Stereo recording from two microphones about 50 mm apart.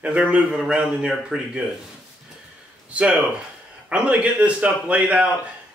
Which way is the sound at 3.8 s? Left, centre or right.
Right.